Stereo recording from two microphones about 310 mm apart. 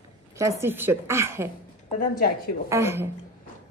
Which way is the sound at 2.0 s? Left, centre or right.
Left.